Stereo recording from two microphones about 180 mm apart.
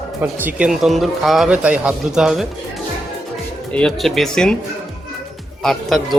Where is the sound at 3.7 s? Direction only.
Centre (ahead or behind).